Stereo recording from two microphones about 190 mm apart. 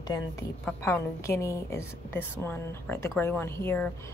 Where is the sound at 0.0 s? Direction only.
20° left (ahead or behind).